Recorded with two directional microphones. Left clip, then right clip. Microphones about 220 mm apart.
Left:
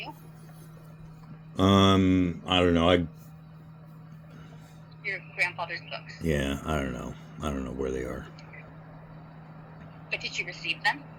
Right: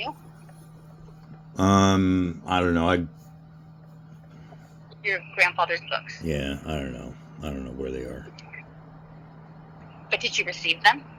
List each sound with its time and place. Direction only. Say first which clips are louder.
1.5 s speech: right 1 dB; 5° right (ahead or behind)
5.0 s speech: right 7 dB; 40° right (ahead or behind)
6.2 s speech: left 1 dB; 15° left (ahead or behind)
10.1 s speech: right 7 dB; 40° right (ahead or behind)